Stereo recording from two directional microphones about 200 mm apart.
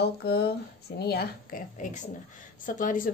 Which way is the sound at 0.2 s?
50° left (ahead or behind).